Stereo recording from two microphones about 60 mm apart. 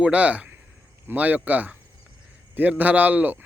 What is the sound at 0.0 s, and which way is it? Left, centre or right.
Speech, right.